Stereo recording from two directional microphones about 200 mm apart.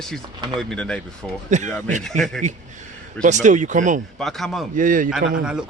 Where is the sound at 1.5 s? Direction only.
35° right (ahead or behind).